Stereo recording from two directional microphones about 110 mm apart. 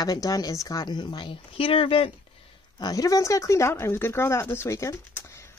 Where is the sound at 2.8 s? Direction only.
35° left (ahead or behind).